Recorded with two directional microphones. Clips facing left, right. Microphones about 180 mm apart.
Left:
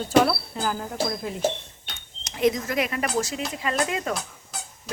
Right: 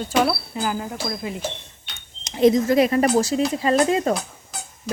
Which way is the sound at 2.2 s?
30° right (ahead or behind).